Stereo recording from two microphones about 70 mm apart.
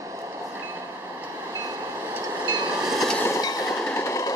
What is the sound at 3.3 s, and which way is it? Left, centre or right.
Train, left.